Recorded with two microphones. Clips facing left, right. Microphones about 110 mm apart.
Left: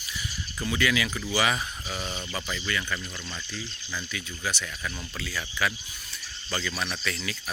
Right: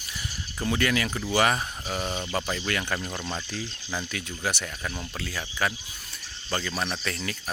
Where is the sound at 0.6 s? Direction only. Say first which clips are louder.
Right 1 dB; 45° right (ahead or behind).